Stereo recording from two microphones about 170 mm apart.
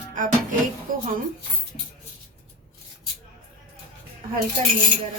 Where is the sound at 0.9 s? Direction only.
55° right (ahead or behind).